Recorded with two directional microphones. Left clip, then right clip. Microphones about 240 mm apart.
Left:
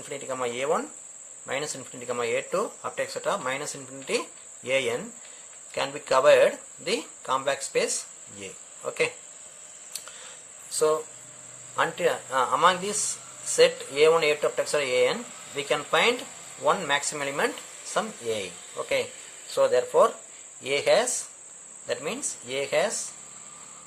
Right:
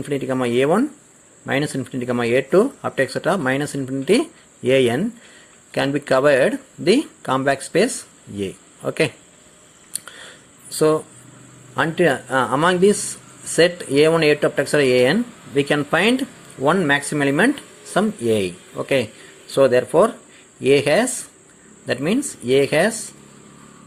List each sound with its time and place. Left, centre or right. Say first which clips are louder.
0.1 s speech: right 9 dB; centre
8.4 s cricket: right 13 dB; right
11.8 s speech: right 7 dB; right
19.5 s speech: right 6 dB; centre